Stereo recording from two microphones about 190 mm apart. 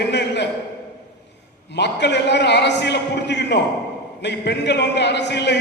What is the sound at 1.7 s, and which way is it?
A man's voice, 65° left (ahead or behind).